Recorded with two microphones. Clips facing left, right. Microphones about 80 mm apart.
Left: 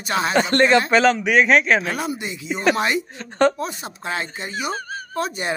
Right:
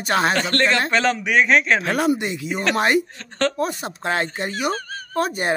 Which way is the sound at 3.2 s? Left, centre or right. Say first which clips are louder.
Left 5 dB; centre.